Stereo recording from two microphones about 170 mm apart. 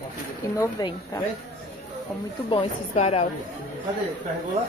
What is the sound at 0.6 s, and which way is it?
Speech, 20° left (ahead or behind).